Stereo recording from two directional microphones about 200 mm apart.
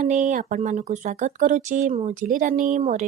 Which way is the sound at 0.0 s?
40° right (ahead or behind).